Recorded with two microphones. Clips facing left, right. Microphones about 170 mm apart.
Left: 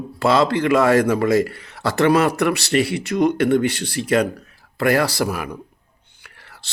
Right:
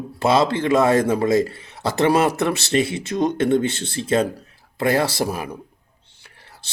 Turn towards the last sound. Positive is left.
turn(degrees=-25)  # may be behind; listen again after turning